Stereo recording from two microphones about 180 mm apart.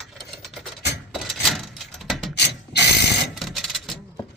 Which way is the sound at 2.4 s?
70° left (ahead or behind).